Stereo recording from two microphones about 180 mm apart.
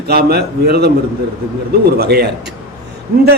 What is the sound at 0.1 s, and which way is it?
Speech, 60° right (ahead or behind).